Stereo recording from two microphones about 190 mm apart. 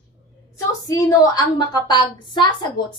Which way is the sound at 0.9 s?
20° left (ahead or behind).